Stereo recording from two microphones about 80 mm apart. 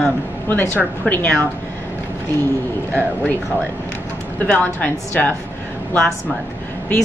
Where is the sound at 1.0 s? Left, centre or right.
Centre.